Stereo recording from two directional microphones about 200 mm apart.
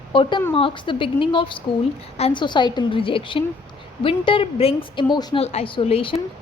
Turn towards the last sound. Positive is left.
turn(degrees=30)  # may be behind; listen again after turning